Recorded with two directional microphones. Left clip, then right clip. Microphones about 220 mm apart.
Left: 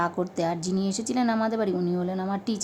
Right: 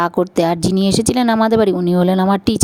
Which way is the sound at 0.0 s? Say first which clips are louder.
Right 11 dB; 40° right (ahead or behind).